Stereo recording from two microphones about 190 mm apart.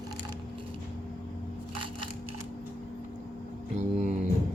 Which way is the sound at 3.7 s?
40° right (ahead or behind).